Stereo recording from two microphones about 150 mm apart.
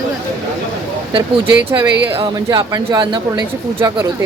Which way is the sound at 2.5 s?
25° right (ahead or behind).